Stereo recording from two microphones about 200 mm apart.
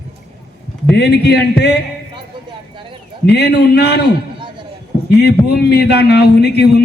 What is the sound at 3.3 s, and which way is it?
Speech, 55° left (ahead or behind).